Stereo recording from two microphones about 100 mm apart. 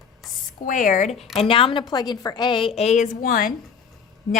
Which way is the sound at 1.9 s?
45° left (ahead or behind).